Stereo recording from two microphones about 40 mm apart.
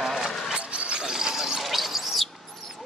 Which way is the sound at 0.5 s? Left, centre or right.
Right.